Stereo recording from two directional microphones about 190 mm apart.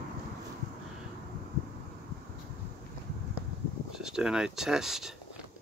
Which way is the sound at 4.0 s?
5° right (ahead or behind).